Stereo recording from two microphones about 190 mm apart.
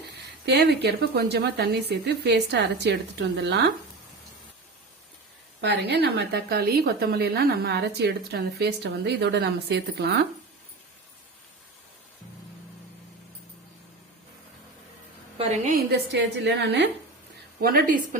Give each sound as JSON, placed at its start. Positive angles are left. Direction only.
{"t": 0.4, "sound": "a woman's voice", "side_deg": -60}
{"t": 5.5, "sound": "a woman's voice", "side_deg": -65}
{"t": 15.7, "sound": "a woman's voice", "side_deg": -65}
{"t": 17.6, "sound": "a woman's voice", "side_deg": -50}